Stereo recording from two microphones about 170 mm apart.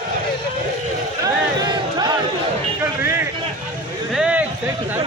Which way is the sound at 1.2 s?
25° right (ahead or behind).